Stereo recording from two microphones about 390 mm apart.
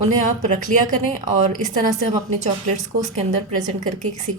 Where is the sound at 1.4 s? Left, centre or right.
Centre.